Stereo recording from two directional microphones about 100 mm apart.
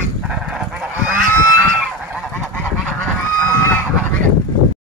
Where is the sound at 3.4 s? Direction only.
15° left (ahead or behind).